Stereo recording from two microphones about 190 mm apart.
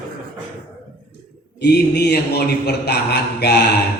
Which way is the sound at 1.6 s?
60° left (ahead or behind).